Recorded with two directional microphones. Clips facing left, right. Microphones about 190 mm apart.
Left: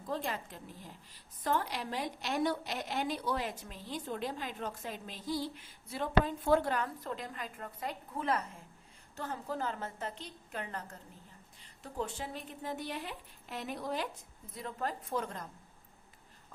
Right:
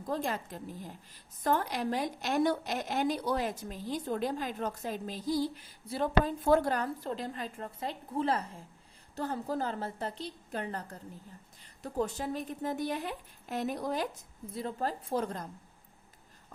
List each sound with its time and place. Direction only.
0.1 s a woman's voice: 40° right (ahead or behind)
14.5 s a woman's voice: 30° right (ahead or behind)